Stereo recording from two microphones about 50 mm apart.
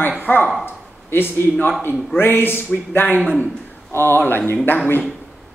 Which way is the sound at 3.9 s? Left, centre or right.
Left.